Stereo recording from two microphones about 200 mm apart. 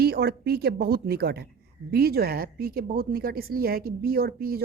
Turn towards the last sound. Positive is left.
turn(degrees=-50)  # may be behind; listen again after turning